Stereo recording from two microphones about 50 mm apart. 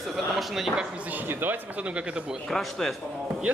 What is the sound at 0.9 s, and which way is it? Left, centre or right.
Speech, right.